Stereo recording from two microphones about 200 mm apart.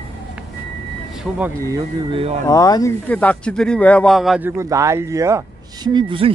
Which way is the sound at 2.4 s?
15° left (ahead or behind).